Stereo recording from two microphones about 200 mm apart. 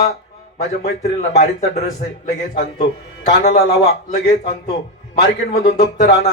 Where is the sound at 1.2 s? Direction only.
35° left (ahead or behind).